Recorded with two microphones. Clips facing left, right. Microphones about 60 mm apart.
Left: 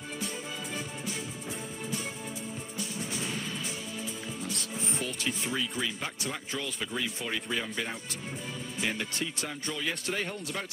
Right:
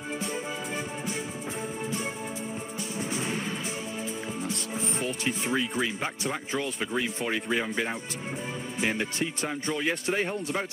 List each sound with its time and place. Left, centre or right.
3.3 s music: right
4.7 s music: centre
5.0 s speech: right
8.8 s speech: right